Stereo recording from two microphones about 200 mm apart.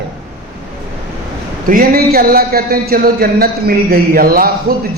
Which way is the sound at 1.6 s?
45° right (ahead or behind).